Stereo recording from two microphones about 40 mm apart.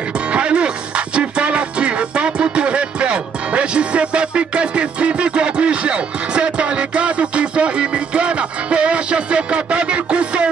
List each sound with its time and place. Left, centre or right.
0.3 s music: right